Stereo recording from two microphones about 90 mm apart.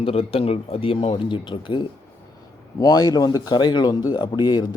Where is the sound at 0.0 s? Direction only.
90° left; by 1.8 s 65° left (ahead or behind).